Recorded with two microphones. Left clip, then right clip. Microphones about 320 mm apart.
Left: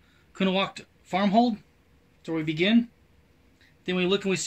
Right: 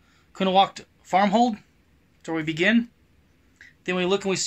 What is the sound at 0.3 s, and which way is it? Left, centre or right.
Speech, centre.